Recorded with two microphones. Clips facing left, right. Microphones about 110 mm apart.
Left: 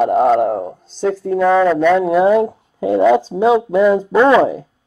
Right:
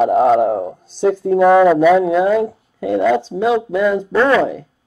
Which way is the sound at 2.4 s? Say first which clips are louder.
Left 2 dB; 20° left (ahead or behind).